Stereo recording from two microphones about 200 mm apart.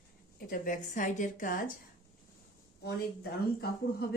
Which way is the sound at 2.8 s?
50° left (ahead or behind).